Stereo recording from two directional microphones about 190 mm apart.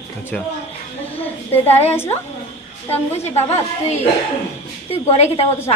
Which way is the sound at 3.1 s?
35° left (ahead or behind).